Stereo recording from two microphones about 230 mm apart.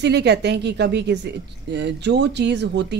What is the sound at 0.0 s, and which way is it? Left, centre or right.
Speech, right.